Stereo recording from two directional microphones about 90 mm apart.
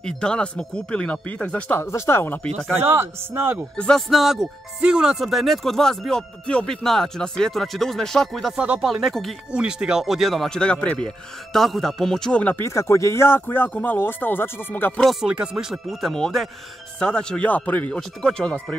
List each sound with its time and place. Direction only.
0.0 s speech: 10° left (ahead or behind)
1.8 s speech: 30° left (ahead or behind)
2.8 s speech: 25° right (ahead or behind)
3.7 s speech: 10° left (ahead or behind)
4.1 s speech: 5° right (ahead or behind)
8.5 s speech: 15° right (ahead or behind)
9.5 s speech: 10° right (ahead or behind); by 11.0 s 15° left (ahead or behind)
11.5 s speech: 5° left (ahead or behind)
12.5 s speech: 30° left (ahead or behind)
15.0 s speech: centre (ahead or behind)
15.2 s speech: 10° right (ahead or behind); by 18.8 s 15° left (ahead or behind)